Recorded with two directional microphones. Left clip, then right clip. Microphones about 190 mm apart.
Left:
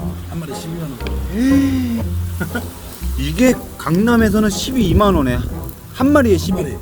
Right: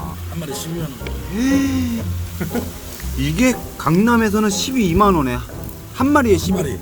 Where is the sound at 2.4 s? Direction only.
40° left (ahead or behind).